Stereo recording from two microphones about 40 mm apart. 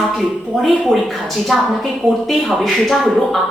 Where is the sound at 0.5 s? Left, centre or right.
Centre.